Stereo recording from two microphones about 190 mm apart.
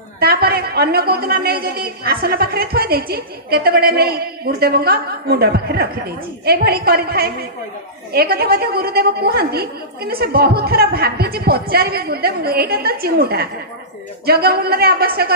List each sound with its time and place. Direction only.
0.2 s a man's voice: 55° right (ahead or behind)